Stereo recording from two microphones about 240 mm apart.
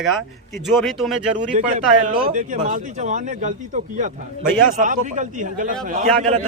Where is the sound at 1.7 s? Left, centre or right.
Right.